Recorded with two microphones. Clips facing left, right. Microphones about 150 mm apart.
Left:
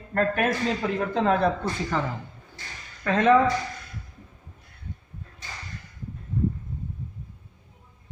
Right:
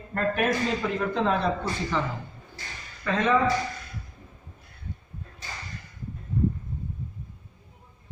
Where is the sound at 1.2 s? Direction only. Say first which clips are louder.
Left 5 dB; 50° left (ahead or behind).